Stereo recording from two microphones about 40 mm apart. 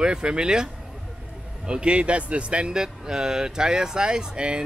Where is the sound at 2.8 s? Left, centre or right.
Centre.